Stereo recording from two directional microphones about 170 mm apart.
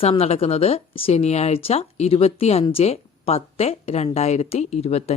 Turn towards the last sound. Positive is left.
turn(degrees=40)  # may be behind; listen again after turning